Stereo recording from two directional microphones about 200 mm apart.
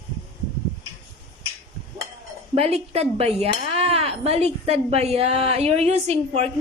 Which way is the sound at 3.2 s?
30° right (ahead or behind).